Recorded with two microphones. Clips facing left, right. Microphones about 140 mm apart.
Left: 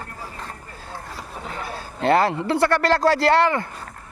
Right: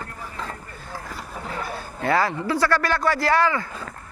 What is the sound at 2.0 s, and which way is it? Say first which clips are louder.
Speech: left 4 dB; 25° left (ahead or behind).